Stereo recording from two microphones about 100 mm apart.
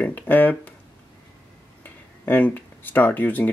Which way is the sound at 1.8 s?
20° left (ahead or behind).